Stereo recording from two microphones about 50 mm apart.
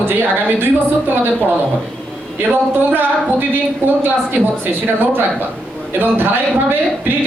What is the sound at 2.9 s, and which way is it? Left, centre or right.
A woman's voice, right.